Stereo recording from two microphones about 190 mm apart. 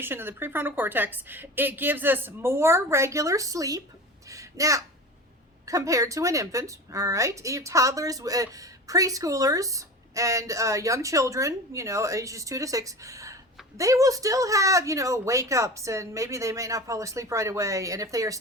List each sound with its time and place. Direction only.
0.0 s a woman's voice: 10° right (ahead or behind)